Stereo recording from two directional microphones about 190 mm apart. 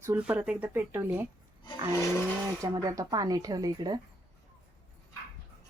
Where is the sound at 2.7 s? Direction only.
20° right (ahead or behind).